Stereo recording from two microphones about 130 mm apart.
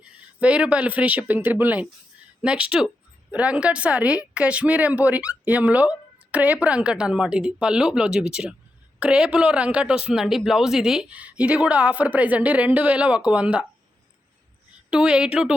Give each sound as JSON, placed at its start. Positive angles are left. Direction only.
{"t": 0.0, "sound": "speech", "side_deg": -10}
{"t": 14.8, "sound": "speech", "side_deg": -5}